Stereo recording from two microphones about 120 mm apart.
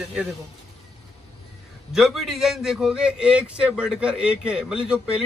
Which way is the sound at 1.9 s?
5° right (ahead or behind).